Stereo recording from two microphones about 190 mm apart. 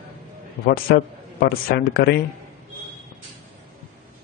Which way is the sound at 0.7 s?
50° left (ahead or behind).